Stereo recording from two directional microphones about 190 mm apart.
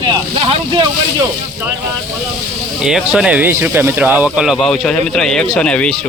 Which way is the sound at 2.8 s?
5° right (ahead or behind).